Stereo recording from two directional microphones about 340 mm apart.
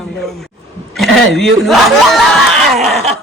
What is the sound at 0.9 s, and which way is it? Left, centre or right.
A woman's voice, centre.